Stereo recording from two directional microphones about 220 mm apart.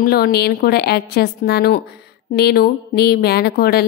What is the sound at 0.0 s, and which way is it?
Speech, 45° left (ahead or behind).